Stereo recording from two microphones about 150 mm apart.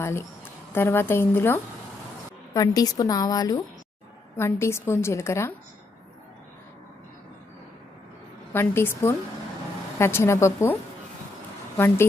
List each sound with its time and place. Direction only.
0.0 s a woman's voice: 20° left (ahead or behind)
8.5 s a woman's voice: 15° left (ahead or behind)